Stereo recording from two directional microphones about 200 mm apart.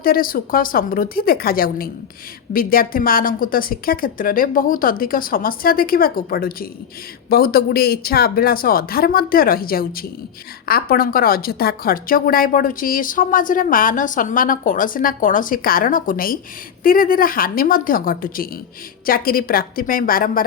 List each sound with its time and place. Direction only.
0.0 s a woman's voice: 45° left (ahead or behind)